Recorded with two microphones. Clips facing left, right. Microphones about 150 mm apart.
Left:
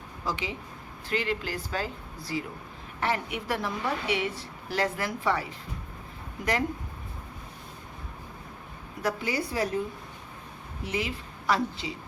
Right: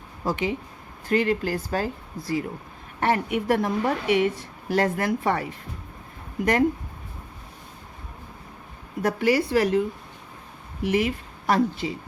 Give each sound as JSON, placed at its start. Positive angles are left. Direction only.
{"t": 0.3, "sound": "a woman's voice", "side_deg": -50}
{"t": 9.0, "sound": "a woman's voice", "side_deg": -55}
{"t": 9.3, "sound": "a woman's voice", "side_deg": -85}
{"t": 10.8, "sound": "a woman's voice", "side_deg": -60}